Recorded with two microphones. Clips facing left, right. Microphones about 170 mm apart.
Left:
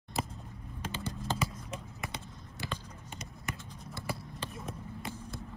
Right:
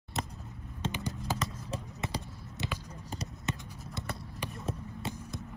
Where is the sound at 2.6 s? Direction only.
20° right (ahead or behind).